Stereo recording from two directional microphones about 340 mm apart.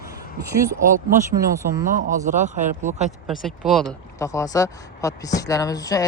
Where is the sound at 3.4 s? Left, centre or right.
Centre.